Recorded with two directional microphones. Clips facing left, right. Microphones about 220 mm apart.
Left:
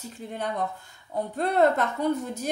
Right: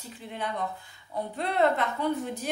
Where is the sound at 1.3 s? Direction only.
45° left (ahead or behind).